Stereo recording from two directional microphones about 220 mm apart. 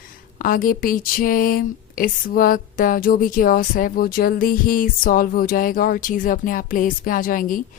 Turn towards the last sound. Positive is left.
turn(degrees=40)  # may be behind; listen again after turning